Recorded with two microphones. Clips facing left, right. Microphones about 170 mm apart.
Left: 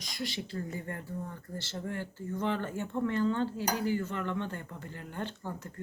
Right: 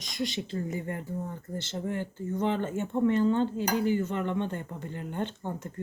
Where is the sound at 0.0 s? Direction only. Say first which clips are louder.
Right 5 dB; 20° right (ahead or behind).